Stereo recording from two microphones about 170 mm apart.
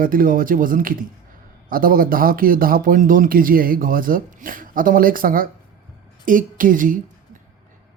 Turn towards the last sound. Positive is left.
turn(degrees=-50)  # may be behind; listen again after turning